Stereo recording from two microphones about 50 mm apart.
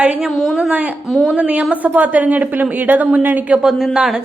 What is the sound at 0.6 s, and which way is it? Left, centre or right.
Speech, right.